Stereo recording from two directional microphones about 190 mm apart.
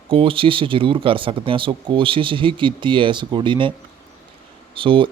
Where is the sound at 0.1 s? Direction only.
30° right (ahead or behind).